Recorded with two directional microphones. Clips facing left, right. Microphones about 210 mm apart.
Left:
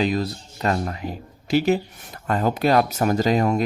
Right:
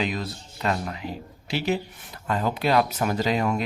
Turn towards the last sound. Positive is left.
turn(degrees=40)  # may be behind; listen again after turning